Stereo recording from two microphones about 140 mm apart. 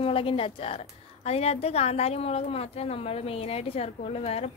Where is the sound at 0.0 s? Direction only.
40° left (ahead or behind).